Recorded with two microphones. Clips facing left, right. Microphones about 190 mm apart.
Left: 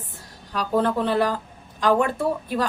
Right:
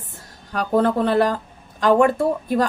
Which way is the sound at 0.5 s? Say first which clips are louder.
Right 3 dB; 50° right (ahead or behind).